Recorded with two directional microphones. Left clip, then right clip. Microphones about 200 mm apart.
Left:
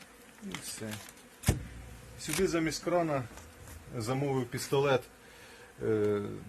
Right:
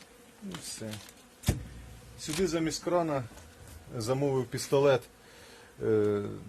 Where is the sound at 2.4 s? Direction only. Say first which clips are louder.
Even; 35° right (ahead or behind).